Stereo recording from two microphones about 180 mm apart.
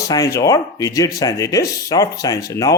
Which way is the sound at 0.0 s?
20° left (ahead or behind).